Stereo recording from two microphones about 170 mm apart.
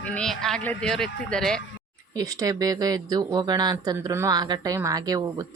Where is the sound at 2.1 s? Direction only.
20° right (ahead or behind).